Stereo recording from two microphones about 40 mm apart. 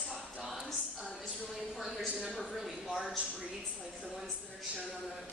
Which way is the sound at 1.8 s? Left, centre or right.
Centre.